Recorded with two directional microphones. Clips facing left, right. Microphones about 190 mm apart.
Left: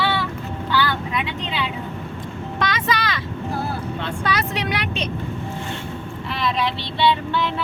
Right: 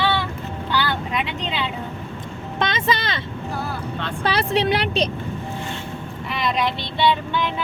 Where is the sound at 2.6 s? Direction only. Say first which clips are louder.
Right 1 dB; 25° right (ahead or behind).